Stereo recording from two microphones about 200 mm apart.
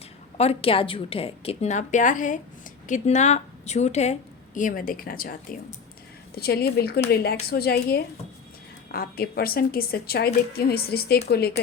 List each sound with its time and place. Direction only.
0.3 s a woman's voice: 30° left (ahead or behind); by 11.5 s 50° left (ahead or behind)